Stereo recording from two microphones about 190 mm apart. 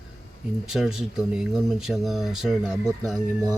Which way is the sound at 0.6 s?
Centre (ahead or behind).